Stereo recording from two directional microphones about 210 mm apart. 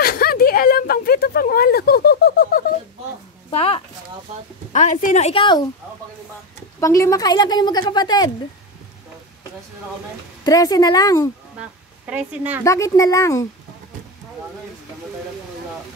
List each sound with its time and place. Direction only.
0.0 s a sound: 45° left (ahead or behind)
3.4 s a sound: 30° left (ahead or behind)
4.7 s a woman's voice: 35° left (ahead or behind)
6.8 s a woman's voice: 15° left (ahead or behind)
10.4 s speech: 15° left (ahead or behind)
12.1 s a woman's voice: 5° right (ahead or behind)
12.6 s speech: 15° left (ahead or behind)